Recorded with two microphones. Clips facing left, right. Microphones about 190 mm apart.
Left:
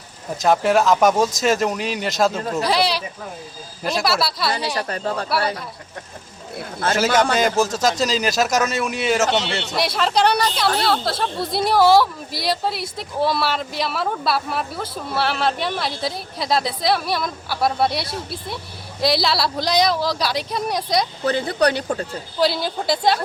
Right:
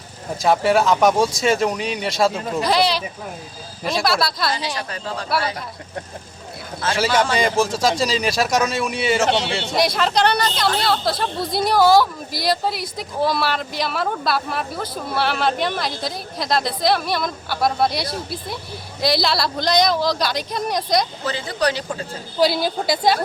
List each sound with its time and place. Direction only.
0.4 s speech: centre (ahead or behind)
4.9 s speech: 55° left (ahead or behind)
6.7 s speech: 50° left (ahead or behind)
7.3 s speech: centre (ahead or behind)
21.2 s speech: 55° left (ahead or behind)
22.4 s speech: centre (ahead or behind)